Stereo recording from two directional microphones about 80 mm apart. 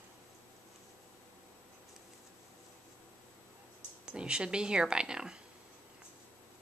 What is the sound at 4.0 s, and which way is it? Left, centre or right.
Speech, centre.